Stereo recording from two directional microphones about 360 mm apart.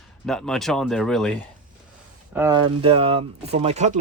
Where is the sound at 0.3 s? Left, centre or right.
Centre.